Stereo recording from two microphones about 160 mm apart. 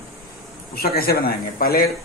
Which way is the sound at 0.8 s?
70° left (ahead or behind).